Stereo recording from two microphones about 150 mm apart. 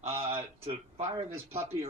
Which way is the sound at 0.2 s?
40° right (ahead or behind).